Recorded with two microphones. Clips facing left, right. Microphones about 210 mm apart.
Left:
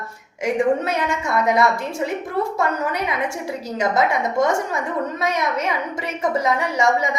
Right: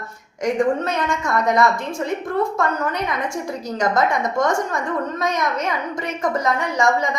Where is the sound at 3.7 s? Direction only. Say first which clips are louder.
Even; 5° left (ahead or behind).